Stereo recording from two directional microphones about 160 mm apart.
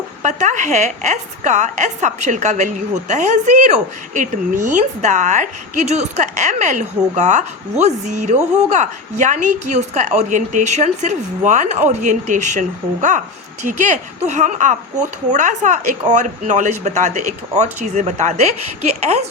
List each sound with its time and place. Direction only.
0.2 s a woman's voice: 50° right (ahead or behind)